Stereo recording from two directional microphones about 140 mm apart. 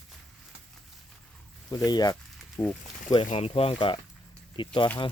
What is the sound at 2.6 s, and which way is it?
Speech, 15° left (ahead or behind).